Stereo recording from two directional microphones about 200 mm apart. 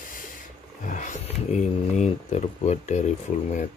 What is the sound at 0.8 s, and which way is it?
Speech, 40° left (ahead or behind).